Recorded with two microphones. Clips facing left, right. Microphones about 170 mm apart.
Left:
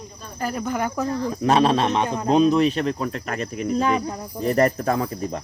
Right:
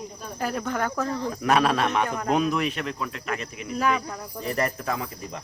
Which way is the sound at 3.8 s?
30° left (ahead or behind).